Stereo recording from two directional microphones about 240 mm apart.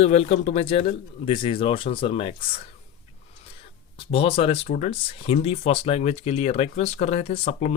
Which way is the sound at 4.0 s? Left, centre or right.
Left.